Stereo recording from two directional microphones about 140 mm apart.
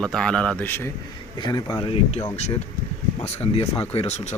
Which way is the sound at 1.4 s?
30° left (ahead or behind).